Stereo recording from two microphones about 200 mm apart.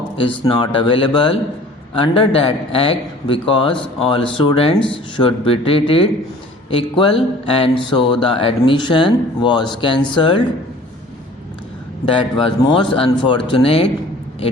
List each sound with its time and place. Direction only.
0.2 s a man's voice: 25° left (ahead or behind)
12.0 s a man's voice: 25° left (ahead or behind)